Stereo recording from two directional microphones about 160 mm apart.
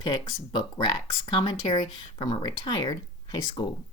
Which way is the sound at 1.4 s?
25° left (ahead or behind).